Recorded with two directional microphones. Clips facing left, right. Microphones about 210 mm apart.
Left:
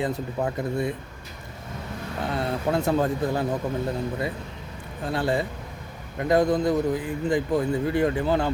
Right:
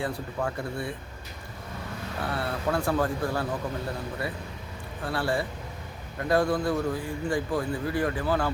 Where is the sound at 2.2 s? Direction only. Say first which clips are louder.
Left 3 dB; 20° left (ahead or behind).